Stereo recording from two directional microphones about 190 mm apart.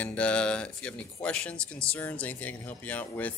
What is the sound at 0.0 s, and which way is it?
Speech, 5° left (ahead or behind).